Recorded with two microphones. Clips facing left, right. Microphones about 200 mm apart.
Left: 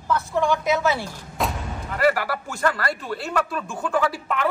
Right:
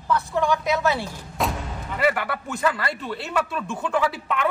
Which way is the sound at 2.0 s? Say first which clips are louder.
Left 2 dB; centre (ahead or behind).